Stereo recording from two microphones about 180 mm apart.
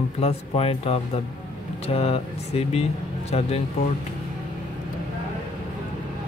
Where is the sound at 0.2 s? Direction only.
35° left (ahead or behind).